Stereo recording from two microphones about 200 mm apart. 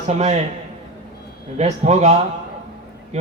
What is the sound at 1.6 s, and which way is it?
Speech, 35° right (ahead or behind).